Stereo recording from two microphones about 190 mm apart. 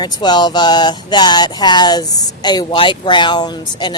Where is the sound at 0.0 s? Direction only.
20° left (ahead or behind).